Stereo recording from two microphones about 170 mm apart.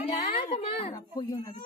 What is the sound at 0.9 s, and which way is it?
Speech, 20° left (ahead or behind).